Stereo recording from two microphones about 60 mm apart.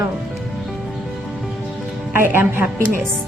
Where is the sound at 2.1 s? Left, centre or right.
Right.